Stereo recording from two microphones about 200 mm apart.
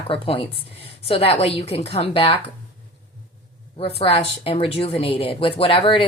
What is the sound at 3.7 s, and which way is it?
Speech, 30° left (ahead or behind).